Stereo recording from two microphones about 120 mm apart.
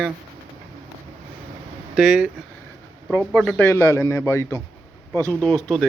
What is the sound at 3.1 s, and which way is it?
Speech, 10° left (ahead or behind).